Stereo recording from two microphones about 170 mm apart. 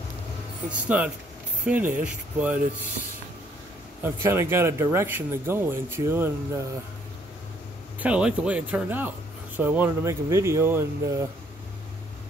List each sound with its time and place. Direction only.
0.7 s speech: 10° right (ahead or behind)
4.0 s speech: 15° right (ahead or behind)
8.0 s speech: 5° right (ahead or behind)